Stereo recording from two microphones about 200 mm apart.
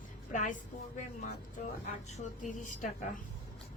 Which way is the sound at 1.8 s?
35° left (ahead or behind).